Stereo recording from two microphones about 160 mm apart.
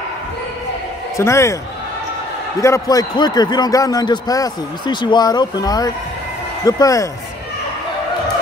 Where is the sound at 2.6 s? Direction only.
20° left (ahead or behind).